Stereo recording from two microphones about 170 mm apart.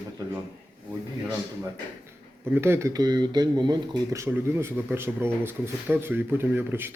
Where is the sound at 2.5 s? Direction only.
15° right (ahead or behind).